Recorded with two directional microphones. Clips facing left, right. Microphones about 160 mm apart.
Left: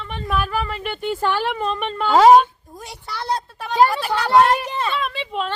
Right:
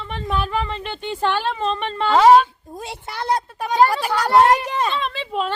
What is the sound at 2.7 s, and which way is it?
Speech, 25° right (ahead or behind).